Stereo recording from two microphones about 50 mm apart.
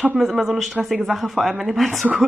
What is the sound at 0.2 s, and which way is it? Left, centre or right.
A woman's voice, centre.